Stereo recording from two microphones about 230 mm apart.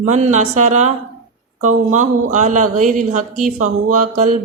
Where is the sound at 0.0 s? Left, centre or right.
Right.